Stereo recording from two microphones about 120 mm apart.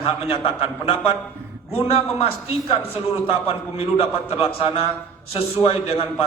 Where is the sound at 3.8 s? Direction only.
55° left (ahead or behind).